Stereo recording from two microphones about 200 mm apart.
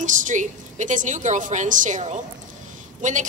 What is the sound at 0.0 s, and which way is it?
A woman's voice, 40° right (ahead or behind).